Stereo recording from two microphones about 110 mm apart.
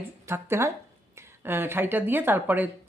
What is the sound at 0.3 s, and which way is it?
Speech, 20° right (ahead or behind).